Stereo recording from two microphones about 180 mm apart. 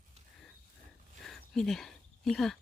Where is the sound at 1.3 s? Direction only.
Centre (ahead or behind).